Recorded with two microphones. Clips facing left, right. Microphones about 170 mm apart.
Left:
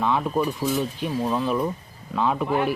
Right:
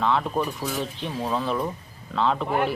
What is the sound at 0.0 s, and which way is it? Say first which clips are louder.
Speech: left 1 dB; 15° left (ahead or behind).